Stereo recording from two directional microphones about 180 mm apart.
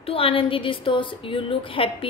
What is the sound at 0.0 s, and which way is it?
A woman's voice, 30° left (ahead or behind).